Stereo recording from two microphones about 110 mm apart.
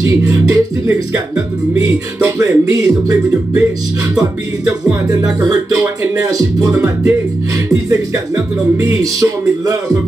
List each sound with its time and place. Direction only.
0.0 s music: 30° right (ahead or behind)
2.3 s music: 30° right (ahead or behind)
5.2 s music: 30° right (ahead or behind)
8.7 s music: 30° right (ahead or behind)